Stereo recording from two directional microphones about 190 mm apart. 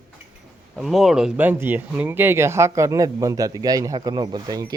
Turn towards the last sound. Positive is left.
turn(degrees=-20)  # may be behind; listen again after turning